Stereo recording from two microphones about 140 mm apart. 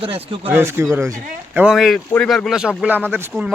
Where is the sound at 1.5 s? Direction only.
5° right (ahead or behind).